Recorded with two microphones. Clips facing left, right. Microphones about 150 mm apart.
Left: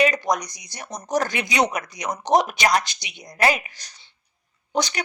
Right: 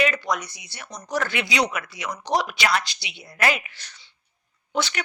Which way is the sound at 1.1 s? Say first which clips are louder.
Left 2 dB; 40° left (ahead or behind).